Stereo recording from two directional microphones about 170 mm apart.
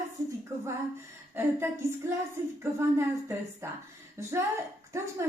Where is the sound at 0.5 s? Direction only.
15° right (ahead or behind).